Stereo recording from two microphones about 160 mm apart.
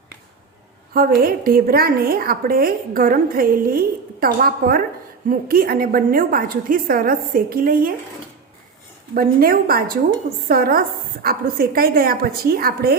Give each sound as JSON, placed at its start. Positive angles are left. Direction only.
{"t": 0.9, "sound": "a woman's voice", "side_deg": -65}
{"t": 9.1, "sound": "a woman's voice", "side_deg": -65}